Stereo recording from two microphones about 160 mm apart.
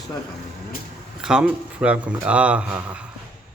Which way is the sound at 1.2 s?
5° right (ahead or behind).